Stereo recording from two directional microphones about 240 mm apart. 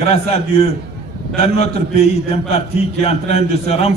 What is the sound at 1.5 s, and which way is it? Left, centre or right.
A man's voice, left.